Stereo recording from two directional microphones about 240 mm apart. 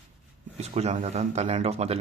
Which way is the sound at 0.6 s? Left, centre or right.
Right.